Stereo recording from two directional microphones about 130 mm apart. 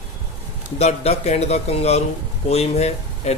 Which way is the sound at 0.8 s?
55° left (ahead or behind).